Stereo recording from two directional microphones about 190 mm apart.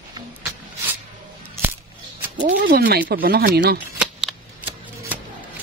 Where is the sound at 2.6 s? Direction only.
50° right (ahead or behind).